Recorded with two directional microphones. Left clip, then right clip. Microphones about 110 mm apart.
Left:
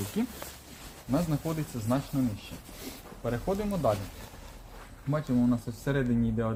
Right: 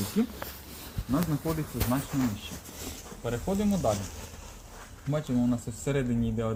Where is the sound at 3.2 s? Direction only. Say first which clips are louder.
Even; 20° left (ahead or behind).